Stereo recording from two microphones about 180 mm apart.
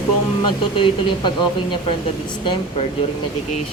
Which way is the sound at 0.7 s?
25° left (ahead or behind).